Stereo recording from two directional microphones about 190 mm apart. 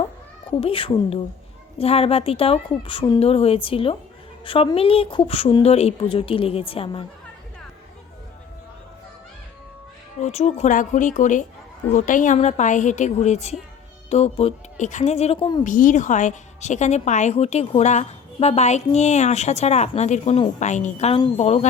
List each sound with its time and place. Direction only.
0.6 s a woman's voice: 30° left (ahead or behind)
10.2 s a woman's voice: 35° left (ahead or behind)
15.6 s a woman's voice: 40° left (ahead or behind)